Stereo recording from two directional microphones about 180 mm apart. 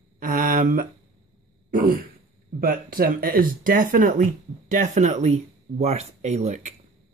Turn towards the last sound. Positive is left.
turn(degrees=-40)  # may be behind; listen again after turning